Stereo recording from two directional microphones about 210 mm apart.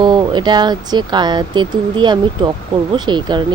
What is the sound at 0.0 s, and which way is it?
Speech, 20° right (ahead or behind).